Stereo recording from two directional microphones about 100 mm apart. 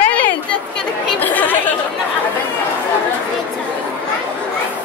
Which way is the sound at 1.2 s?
20° left (ahead or behind).